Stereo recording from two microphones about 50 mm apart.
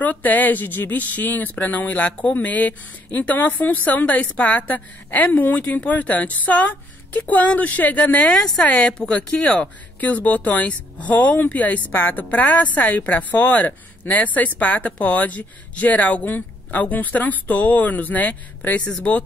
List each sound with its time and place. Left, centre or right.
0.0 s speech: left
8.3 s speech: centre; by 18.9 s left